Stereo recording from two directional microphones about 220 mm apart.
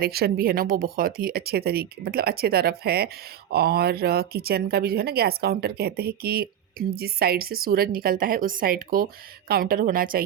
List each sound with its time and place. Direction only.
0.0 s a woman's voice: 45° right (ahead or behind)